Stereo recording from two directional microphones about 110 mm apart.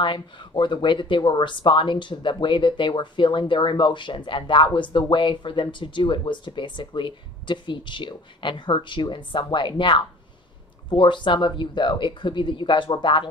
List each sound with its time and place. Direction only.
0.0 s speech: 50° left (ahead or behind)